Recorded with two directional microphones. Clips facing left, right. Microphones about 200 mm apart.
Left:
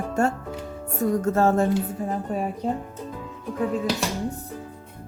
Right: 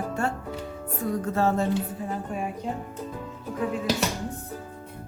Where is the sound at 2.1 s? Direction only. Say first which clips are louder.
Left 4 dB; 35° left (ahead or behind).